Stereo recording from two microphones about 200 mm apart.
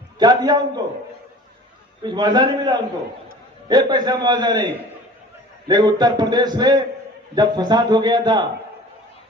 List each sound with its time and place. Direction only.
0.2 s a man's voice: 20° right (ahead or behind)
2.0 s a man's voice: 20° right (ahead or behind)
5.6 s a man's voice: 20° right (ahead or behind)